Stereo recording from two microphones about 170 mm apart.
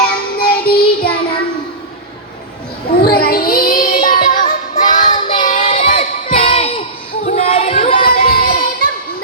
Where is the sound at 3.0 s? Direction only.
65° left (ahead or behind).